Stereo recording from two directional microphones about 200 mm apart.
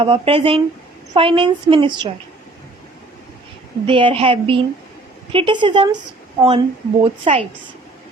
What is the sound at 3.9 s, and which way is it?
A woman's voice, 25° right (ahead or behind).